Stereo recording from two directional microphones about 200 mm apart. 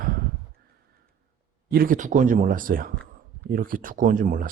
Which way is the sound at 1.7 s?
45° right (ahead or behind).